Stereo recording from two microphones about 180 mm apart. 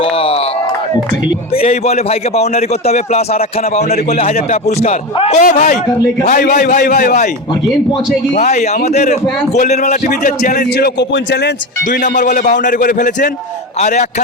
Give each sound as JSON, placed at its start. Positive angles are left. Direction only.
{"t": 0.0, "sound": "a sound", "side_deg": 30}
{"t": 1.6, "sound": "a man's voice", "side_deg": 35}
{"t": 8.4, "sound": "a man's voice", "side_deg": 40}
{"t": 10.8, "sound": "a man's voice", "side_deg": 65}
{"t": 11.9, "sound": "a man's voice", "side_deg": 45}